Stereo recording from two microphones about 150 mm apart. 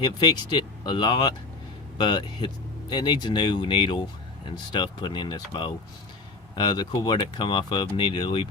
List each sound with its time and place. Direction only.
0.0 s speech: 30° left (ahead or behind)